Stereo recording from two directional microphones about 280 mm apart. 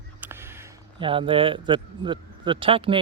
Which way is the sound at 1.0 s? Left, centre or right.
Centre.